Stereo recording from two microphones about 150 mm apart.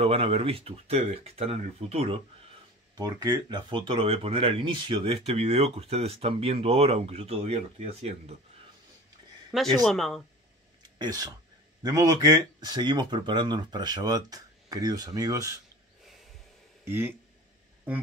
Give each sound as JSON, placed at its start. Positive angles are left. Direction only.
{"t": 0.0, "sound": "speech", "side_deg": -40}
{"t": 3.0, "sound": "speech", "side_deg": -25}
{"t": 9.5, "sound": "speech", "side_deg": 0}
{"t": 11.0, "sound": "speech", "side_deg": -25}
{"t": 16.8, "sound": "speech", "side_deg": -15}